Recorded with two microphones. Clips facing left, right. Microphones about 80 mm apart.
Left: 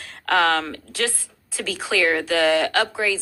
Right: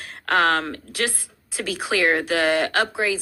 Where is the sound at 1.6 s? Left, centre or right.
Right.